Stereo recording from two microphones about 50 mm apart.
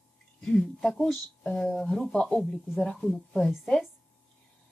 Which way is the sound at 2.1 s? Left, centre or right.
Left.